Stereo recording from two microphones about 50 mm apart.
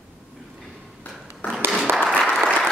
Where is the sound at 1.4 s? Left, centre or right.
Left.